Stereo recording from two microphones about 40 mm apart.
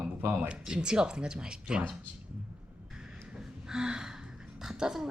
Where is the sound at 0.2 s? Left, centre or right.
Right.